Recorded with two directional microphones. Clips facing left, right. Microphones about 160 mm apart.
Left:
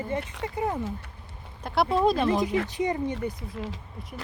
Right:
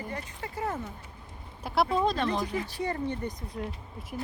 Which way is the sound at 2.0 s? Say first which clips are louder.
Left 5 dB; 10° left (ahead or behind).